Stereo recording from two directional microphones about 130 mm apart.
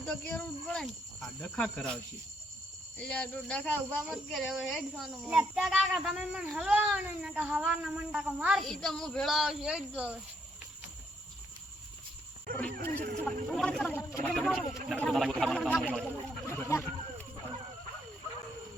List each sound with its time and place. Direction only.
0.0 s speech: 10° left (ahead or behind)
3.0 s cat: 10° left (ahead or behind); by 10.2 s 10° right (ahead or behind)
12.5 s speech: 10° left (ahead or behind)
14.0 s speech: 20° left (ahead or behind)
14.3 s cat: 5° left (ahead or behind)
15.7 s speech: 5° left (ahead or behind)
16.5 s speech: 20° left (ahead or behind)